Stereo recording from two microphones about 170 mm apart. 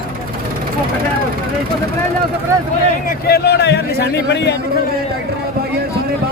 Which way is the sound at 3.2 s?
70° left (ahead or behind).